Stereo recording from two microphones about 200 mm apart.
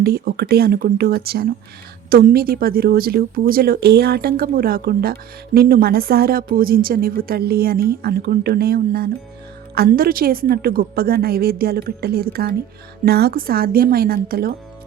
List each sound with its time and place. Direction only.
0.0 s speech: 50° right (ahead or behind)